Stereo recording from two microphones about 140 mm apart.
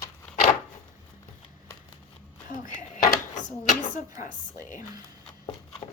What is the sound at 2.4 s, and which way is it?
Speech, 70° left (ahead or behind).